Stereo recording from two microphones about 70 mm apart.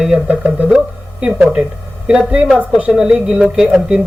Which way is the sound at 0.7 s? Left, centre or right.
Centre.